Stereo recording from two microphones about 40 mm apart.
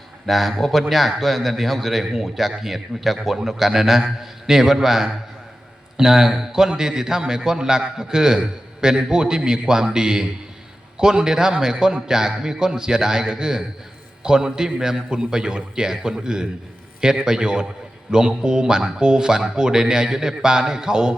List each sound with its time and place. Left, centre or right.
0.3 s a man's voice: centre